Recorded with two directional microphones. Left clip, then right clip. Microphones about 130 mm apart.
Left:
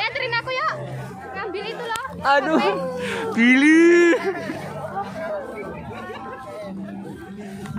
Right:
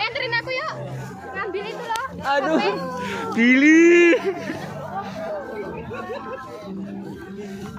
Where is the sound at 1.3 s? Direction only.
5° right (ahead or behind).